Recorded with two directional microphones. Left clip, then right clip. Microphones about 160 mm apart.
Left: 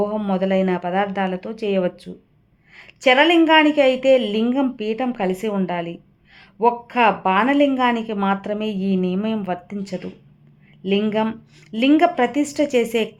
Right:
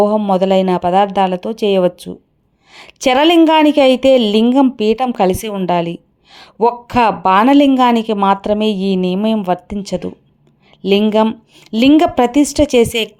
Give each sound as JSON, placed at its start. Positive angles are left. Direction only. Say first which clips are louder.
{"t": 0.3, "sound": "a woman's voice", "louder": "right 7 dB", "side_deg": -30}